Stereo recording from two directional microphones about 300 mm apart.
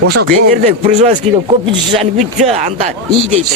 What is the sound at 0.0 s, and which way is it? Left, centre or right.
Speech, right.